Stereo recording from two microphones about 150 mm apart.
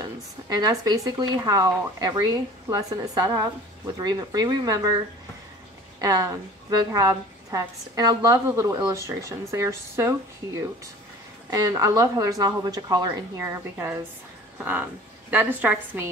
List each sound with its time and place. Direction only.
0.0 s a woman's voice: 25° right (ahead or behind)
5.9 s a woman's voice: 25° right (ahead or behind)
11.5 s a woman's voice: 25° right (ahead or behind)